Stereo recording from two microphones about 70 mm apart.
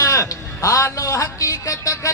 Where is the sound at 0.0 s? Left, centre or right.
Left.